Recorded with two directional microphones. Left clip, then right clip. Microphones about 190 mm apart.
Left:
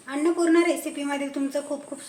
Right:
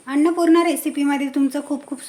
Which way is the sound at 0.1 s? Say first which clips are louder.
Right 6 dB; 50° right (ahead or behind).